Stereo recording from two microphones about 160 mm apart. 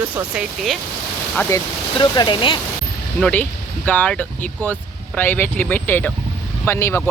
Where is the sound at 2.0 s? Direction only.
30° left (ahead or behind).